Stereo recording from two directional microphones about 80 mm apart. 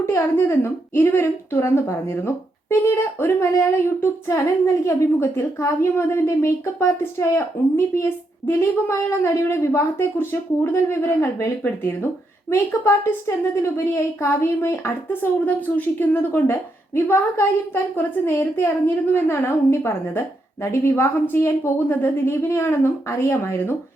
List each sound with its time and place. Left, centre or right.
0.0 s a woman's voice: left